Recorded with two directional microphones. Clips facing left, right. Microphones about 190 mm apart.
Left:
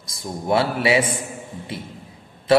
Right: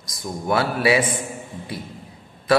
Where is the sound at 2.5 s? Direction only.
25° left (ahead or behind).